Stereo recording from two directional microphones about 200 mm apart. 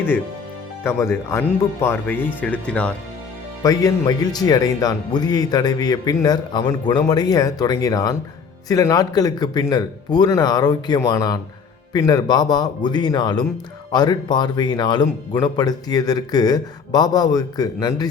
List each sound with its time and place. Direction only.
0.9 s speech: 15° left (ahead or behind)
3.6 s speech: 15° left (ahead or behind)